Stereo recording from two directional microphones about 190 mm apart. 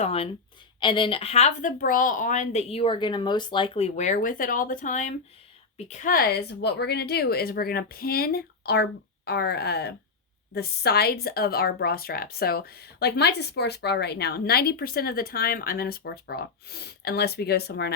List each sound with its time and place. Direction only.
0.0 s a woman's voice: 30° left (ahead or behind); by 17.9 s 55° left (ahead or behind)